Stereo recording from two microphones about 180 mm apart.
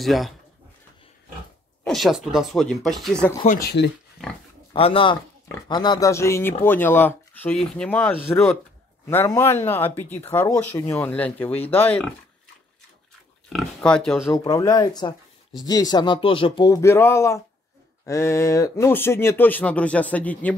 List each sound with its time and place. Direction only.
0.0 s speech: centre (ahead or behind)
1.9 s speech: centre (ahead or behind)
3.4 s speech: 60° left (ahead or behind)
4.7 s speech: 30° left (ahead or behind); by 11.6 s 10° left (ahead or behind)
13.5 s speech: centre (ahead or behind)
14.3 s speech: 20° left (ahead or behind)